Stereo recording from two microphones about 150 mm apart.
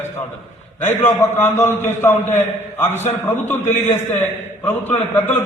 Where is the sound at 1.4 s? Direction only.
15° left (ahead or behind).